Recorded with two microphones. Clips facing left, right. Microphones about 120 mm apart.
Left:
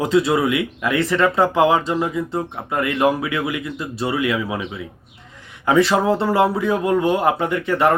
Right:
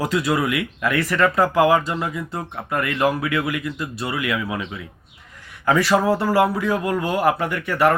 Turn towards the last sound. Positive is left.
turn(degrees=25)  # may be behind; listen again after turning